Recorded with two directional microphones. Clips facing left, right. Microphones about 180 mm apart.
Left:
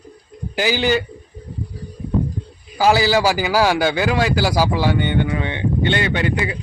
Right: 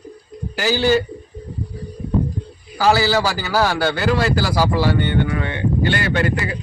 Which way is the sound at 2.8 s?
15° left (ahead or behind).